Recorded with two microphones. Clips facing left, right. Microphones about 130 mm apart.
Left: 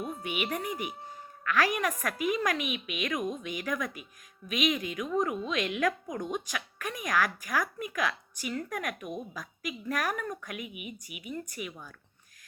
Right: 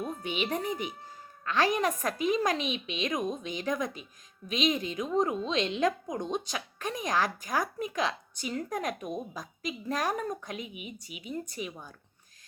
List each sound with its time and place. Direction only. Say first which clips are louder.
0.2 s a woman's voice: right 1 dB; 25° right (ahead or behind)